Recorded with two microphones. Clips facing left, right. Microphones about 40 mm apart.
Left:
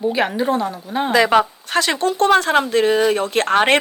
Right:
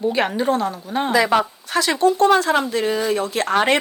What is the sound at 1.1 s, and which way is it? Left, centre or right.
Speech, left.